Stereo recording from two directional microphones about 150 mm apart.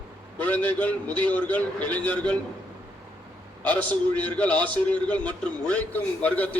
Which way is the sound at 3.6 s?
10° left (ahead or behind).